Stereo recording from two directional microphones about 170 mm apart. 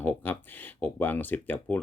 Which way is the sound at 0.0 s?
10° left (ahead or behind).